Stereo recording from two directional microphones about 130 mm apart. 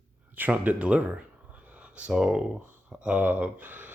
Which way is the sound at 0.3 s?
10° right (ahead or behind).